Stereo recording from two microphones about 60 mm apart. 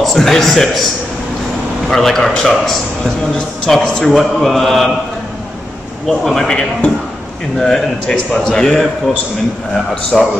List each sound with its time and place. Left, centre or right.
0.0 s a man's voice: centre
1.9 s mantra: centre
3.7 s speech: centre
4.1 s mantra: centre
6.0 s mantra: centre
6.4 s speech: centre
10.1 s mantra: centre